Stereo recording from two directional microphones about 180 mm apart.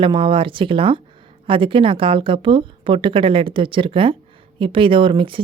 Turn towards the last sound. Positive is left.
turn(degrees=-30)  # may be behind; listen again after turning